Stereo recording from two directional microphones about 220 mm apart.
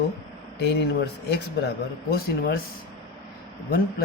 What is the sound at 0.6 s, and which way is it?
Speech, 50° left (ahead or behind).